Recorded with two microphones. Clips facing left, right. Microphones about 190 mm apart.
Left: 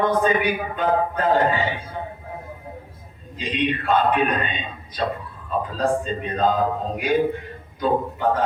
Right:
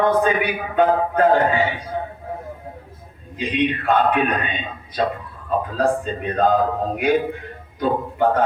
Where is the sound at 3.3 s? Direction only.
55° right (ahead or behind).